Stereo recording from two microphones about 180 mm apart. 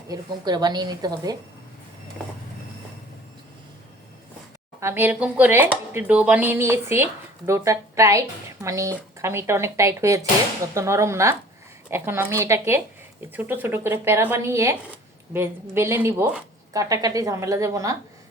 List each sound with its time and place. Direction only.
0.1 s a woman's voice: 20° right (ahead or behind)
4.8 s speech: 15° right (ahead or behind)